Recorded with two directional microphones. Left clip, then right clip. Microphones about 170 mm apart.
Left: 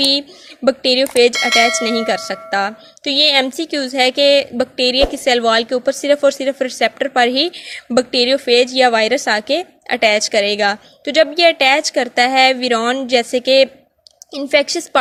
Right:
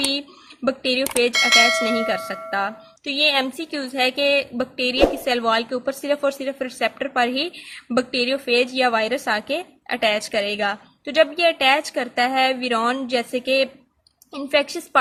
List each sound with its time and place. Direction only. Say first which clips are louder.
0.1 s speech: left 9 dB; 30° left (ahead or behind)
1.3 s speech: left 2 dB; centre (ahead or behind)
2.0 s a woman's voice: left 5 dB; 30° left (ahead or behind)